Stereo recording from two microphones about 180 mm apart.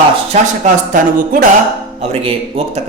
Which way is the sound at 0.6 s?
45° right (ahead or behind).